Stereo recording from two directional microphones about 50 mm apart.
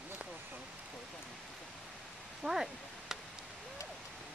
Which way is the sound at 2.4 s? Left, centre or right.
Centre.